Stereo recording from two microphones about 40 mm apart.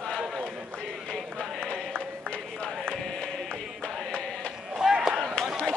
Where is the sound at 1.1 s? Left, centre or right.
Centre.